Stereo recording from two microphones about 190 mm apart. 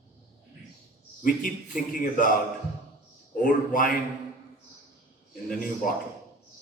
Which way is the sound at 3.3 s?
45° left (ahead or behind).